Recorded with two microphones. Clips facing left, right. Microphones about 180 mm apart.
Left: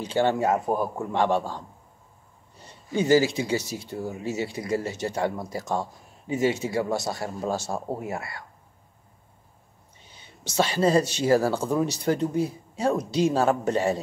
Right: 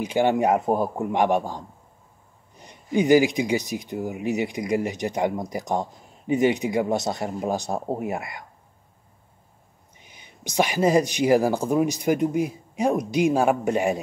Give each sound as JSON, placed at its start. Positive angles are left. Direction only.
{"t": 0.0, "sound": "speech", "side_deg": -15}
{"t": 9.9, "sound": "speech", "side_deg": -15}